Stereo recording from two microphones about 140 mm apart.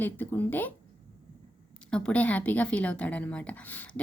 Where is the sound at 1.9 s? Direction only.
5° left (ahead or behind).